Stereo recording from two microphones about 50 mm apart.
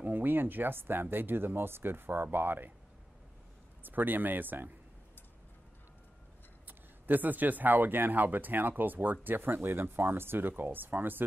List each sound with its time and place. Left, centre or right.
0.0 s speech: right
3.8 s speech: right
6.7 s speech: right